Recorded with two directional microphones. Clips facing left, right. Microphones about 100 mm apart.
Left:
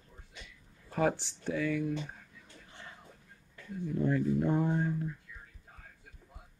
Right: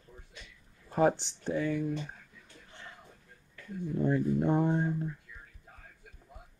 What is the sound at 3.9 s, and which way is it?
Speech, 20° right (ahead or behind).